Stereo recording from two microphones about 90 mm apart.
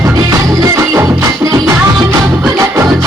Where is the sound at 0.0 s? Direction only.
40° right (ahead or behind).